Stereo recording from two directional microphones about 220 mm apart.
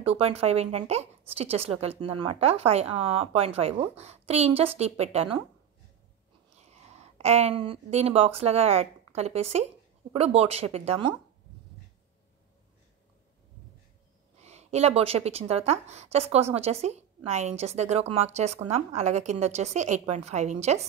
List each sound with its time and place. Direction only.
0.0 s a woman's voice: 30° right (ahead or behind)
6.6 s a woman's voice: 30° right (ahead or behind)
14.4 s a woman's voice: 30° right (ahead or behind)